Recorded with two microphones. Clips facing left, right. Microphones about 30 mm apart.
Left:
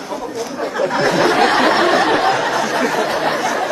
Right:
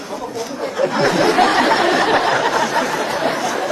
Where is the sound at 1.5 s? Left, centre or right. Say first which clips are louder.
Left 1 dB; left.